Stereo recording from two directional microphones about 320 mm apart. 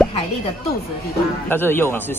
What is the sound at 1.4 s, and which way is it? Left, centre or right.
Speech, centre.